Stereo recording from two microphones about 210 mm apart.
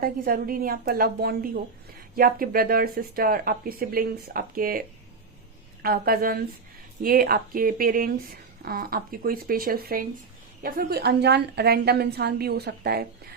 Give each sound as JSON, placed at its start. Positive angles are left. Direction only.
{"t": 0.0, "sound": "speech", "side_deg": -45}
{"t": 5.8, "sound": "speech", "side_deg": -45}